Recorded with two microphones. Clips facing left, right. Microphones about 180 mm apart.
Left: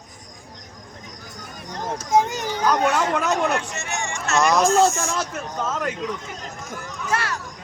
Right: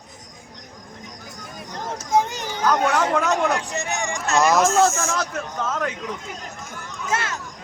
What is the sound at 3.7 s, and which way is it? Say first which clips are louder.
Speech: right 3 dB; 15° right (ahead or behind).